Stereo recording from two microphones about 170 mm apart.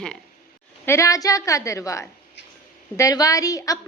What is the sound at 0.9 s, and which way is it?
A woman's voice, 20° left (ahead or behind).